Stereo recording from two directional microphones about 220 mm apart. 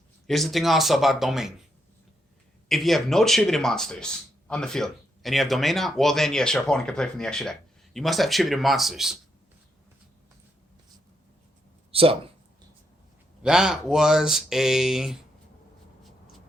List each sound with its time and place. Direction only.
0.3 s speech: centre (ahead or behind)
2.6 s speech: centre (ahead or behind)
11.9 s speech: 25° right (ahead or behind)
13.4 s speech: 5° right (ahead or behind)